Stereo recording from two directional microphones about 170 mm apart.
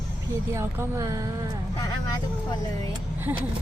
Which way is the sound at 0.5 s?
15° right (ahead or behind).